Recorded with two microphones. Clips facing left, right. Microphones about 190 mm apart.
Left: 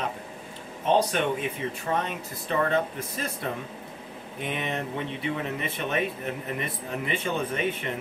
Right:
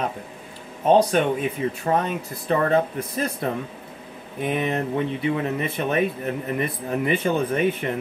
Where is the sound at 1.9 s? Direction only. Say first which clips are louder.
Right 5 dB; 40° right (ahead or behind).